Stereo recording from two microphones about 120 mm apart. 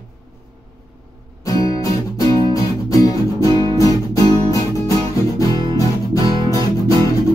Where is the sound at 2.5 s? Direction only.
30° left (ahead or behind).